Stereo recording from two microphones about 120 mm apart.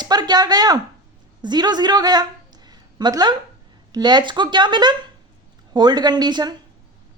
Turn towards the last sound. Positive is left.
turn(degrees=-35)  # may be behind; listen again after turning